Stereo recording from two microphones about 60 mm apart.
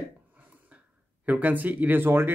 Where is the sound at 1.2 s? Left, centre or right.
Right.